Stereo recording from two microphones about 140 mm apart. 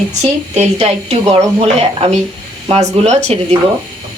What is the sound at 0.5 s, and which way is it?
Speech, 50° right (ahead or behind).